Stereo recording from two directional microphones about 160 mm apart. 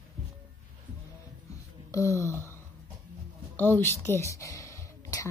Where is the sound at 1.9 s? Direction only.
20° left (ahead or behind).